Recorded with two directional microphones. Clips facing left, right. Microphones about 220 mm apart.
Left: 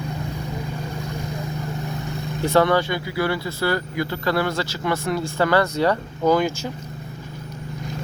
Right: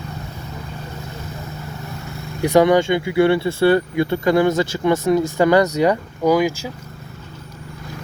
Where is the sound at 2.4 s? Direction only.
15° right (ahead or behind).